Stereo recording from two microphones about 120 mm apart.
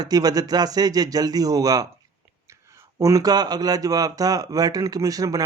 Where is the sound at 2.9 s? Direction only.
30° right (ahead or behind).